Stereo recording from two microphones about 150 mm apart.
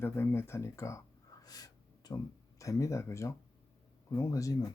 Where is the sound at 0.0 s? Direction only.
15° left (ahead or behind).